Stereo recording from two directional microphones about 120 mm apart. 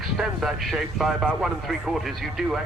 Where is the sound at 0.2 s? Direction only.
Centre (ahead or behind).